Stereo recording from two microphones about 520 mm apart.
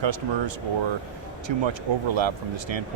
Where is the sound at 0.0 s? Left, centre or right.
Right.